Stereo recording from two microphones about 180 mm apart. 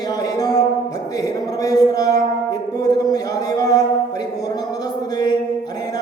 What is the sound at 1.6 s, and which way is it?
Music, 20° left (ahead or behind).